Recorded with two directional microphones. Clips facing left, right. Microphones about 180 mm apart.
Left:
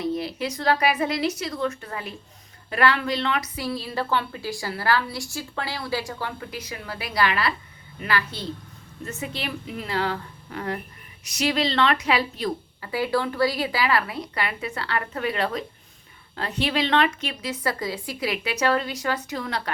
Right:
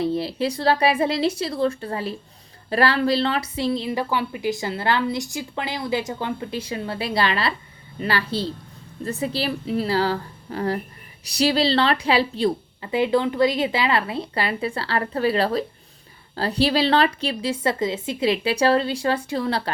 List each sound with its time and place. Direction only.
0.0 s a woman's voice: 30° right (ahead or behind)